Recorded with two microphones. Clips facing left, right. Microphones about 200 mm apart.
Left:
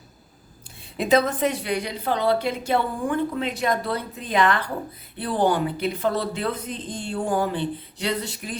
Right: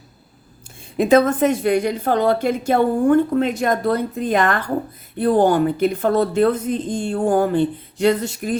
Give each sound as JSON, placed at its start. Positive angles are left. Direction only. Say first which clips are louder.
{"t": 0.9, "sound": "a woman's voice", "louder": "right 6 dB", "side_deg": -50}